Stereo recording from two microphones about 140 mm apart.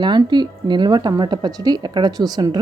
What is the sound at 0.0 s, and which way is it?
Speech, 30° right (ahead or behind).